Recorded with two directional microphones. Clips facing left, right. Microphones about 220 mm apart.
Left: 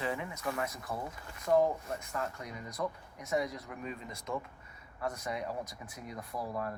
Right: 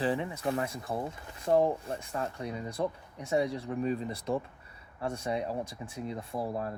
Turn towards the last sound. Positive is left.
turn(degrees=-30)  # may be behind; listen again after turning